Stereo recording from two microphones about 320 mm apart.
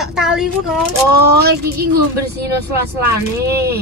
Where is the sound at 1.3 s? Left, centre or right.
Right.